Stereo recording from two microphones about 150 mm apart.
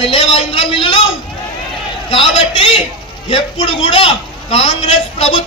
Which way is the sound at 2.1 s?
35° left (ahead or behind).